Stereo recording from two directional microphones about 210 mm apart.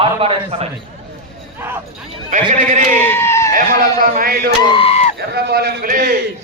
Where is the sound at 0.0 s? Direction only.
25° right (ahead or behind).